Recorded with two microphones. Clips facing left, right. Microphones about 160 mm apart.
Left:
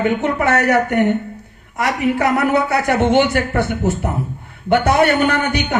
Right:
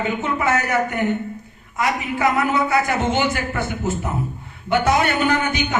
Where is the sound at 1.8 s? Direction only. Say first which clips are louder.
Left 4 dB; 65° left (ahead or behind).